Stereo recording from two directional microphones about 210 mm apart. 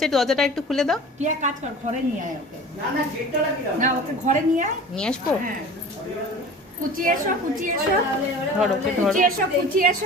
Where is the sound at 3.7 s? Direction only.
35° right (ahead or behind).